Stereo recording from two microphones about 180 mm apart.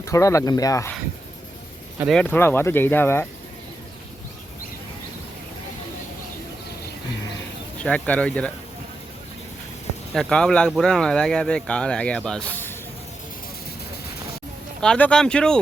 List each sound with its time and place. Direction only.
0.0 s speech: 15° left (ahead or behind)
2.0 s speech: 5° left (ahead or behind)
7.8 s speech: 5° left (ahead or behind)
10.2 s speech: 5° left (ahead or behind)
14.8 s speech: 5° left (ahead or behind)